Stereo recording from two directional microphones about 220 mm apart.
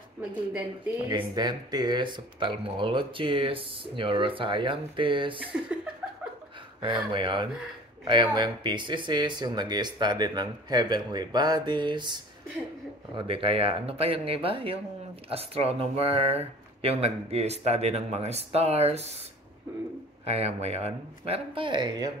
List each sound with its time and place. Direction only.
1.0 s speech: 20° right (ahead or behind)
6.8 s speech: 20° right (ahead or behind)
20.2 s speech: 30° right (ahead or behind)